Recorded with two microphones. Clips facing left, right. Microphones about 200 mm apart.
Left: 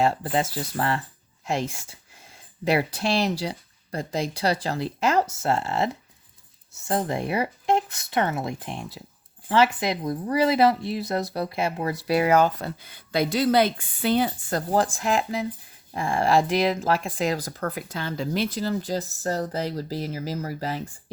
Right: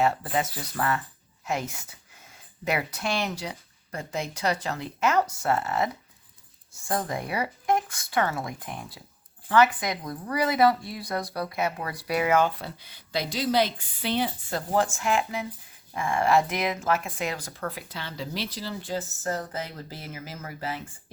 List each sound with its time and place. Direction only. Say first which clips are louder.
0.0 s speech: left 2 dB; 30° left (ahead or behind)